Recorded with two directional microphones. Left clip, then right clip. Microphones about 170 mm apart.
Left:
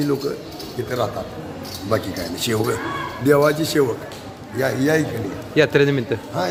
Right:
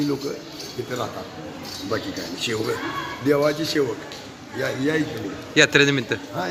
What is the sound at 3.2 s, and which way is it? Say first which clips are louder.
A man's voice: left 4 dB; 85° left.